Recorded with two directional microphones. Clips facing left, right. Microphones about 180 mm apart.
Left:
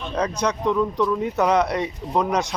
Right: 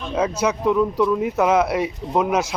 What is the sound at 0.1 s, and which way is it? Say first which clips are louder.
Speech: right 3 dB; 5° right (ahead or behind).